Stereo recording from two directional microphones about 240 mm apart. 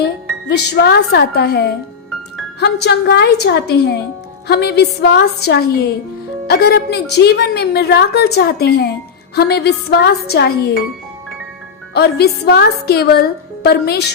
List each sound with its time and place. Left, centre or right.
0.0 s a woman's voice: left
11.9 s a woman's voice: left